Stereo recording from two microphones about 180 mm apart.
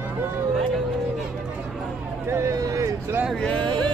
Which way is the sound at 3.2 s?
5° left (ahead or behind).